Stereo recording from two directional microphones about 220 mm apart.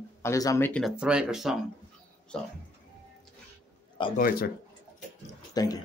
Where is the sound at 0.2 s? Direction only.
15° left (ahead or behind).